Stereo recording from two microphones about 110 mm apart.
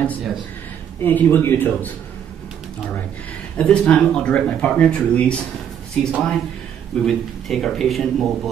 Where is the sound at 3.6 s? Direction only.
10° left (ahead or behind).